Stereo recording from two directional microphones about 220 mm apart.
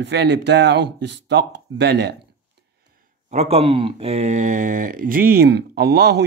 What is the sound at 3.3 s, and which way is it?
Speech, 25° right (ahead or behind).